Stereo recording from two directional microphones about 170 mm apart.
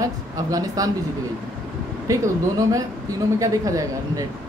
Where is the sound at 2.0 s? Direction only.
20° right (ahead or behind).